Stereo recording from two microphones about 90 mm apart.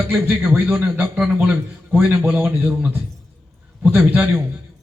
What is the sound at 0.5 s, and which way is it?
Speech, 25° right (ahead or behind).